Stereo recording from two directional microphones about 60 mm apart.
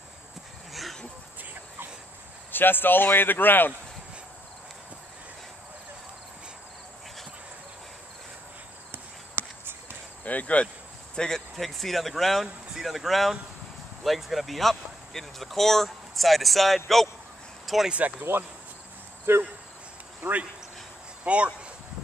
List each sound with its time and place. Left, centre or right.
1.4 s a sound: right
2.5 s speech: left
8.9 s a sound: right
10.2 s speech: left
11.1 s speech: centre
18.3 s speech: right
20.2 s speech: right